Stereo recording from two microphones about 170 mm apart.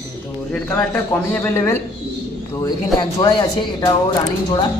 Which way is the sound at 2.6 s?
25° left (ahead or behind).